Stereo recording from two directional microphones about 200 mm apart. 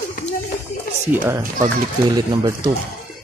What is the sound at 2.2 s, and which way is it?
Speech, 20° right (ahead or behind).